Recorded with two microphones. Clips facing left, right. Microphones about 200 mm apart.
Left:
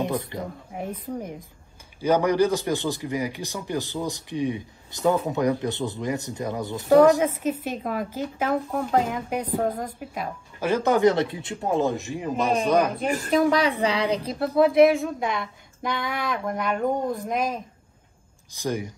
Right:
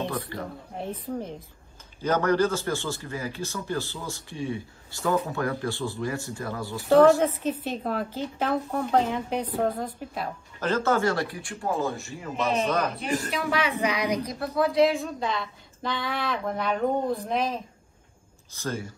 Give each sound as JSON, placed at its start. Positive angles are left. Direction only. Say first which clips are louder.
{"t": 0.0, "sound": "a man's voice", "louder": "left 4 dB", "side_deg": 20}
{"t": 13.0, "sound": "a man's voice", "louder": "left 7 dB", "side_deg": 40}